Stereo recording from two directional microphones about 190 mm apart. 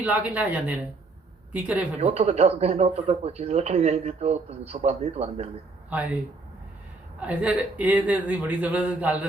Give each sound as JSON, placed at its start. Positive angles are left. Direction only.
{"t": 0.0, "sound": "speech", "side_deg": -10}
{"t": 2.0, "sound": "speech", "side_deg": -35}
{"t": 5.9, "sound": "speech", "side_deg": -10}
{"t": 7.2, "sound": "speech", "side_deg": -5}